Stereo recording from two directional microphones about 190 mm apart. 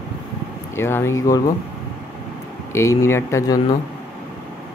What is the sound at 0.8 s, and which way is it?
Speech, 10° left (ahead or behind).